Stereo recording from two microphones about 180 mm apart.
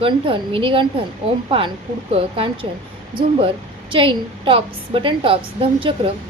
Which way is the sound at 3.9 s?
30° right (ahead or behind).